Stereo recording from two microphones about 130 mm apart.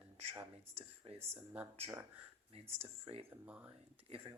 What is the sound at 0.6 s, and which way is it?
Speech, 50° right (ahead or behind).